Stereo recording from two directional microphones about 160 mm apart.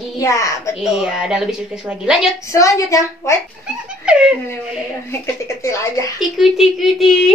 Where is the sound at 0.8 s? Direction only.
5° right (ahead or behind).